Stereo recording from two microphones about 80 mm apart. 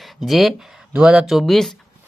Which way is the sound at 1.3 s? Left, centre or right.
Centre.